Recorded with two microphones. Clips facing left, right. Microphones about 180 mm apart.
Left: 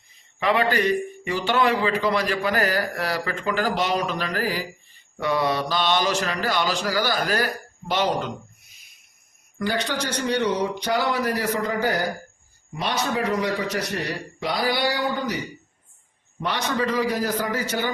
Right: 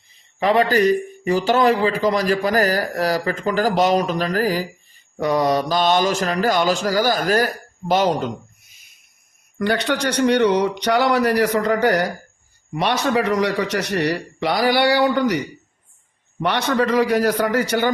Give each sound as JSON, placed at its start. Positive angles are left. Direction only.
{"t": 0.3, "sound": "a man's voice", "side_deg": -35}
{"t": 5.1, "sound": "mantra", "side_deg": -40}
{"t": 9.6, "sound": "a man's voice", "side_deg": -70}